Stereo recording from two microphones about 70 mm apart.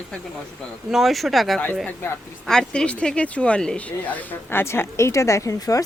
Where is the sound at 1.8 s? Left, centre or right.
Left.